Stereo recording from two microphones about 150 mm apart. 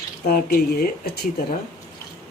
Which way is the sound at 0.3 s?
85° left.